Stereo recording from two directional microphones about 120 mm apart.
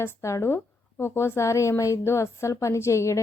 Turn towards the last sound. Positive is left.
turn(degrees=25)  # may be behind; listen again after turning